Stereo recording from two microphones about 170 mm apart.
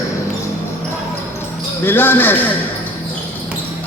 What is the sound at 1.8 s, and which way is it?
Speech, 10° left (ahead or behind).